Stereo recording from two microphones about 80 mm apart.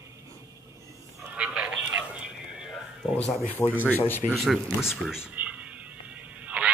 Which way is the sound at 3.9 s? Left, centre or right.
Left.